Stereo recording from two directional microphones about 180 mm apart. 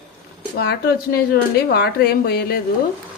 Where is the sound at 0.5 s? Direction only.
65° left (ahead or behind).